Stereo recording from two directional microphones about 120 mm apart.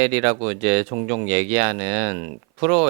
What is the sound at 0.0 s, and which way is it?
Speech, 20° right (ahead or behind).